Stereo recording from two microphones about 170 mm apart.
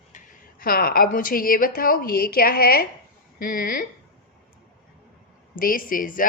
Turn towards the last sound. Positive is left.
turn(degrees=55)  # may be behind; listen again after turning